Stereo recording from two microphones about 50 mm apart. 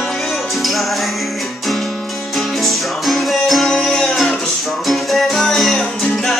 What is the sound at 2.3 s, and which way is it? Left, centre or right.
Music, centre.